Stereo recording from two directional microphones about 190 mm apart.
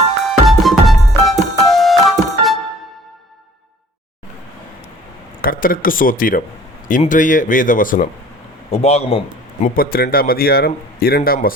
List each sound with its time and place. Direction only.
0.3 s music: centre (ahead or behind)
5.4 s speech: 50° left (ahead or behind)
8.7 s a man's voice: 35° left (ahead or behind)
9.6 s speech: 50° left (ahead or behind)